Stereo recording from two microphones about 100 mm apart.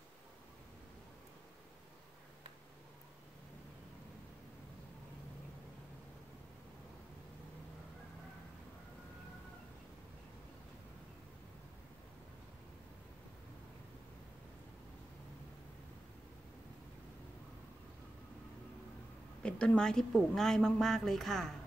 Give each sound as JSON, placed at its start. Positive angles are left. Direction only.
{"t": 19.4, "sound": "speech", "side_deg": 10}